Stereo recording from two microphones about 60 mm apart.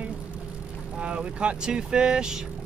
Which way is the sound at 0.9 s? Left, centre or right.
Centre.